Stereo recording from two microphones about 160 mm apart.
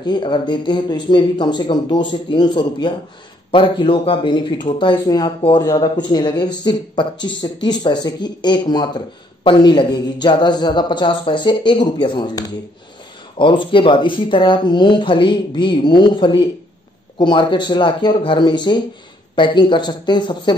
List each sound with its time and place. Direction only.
0.0 s speech: 30° left (ahead or behind)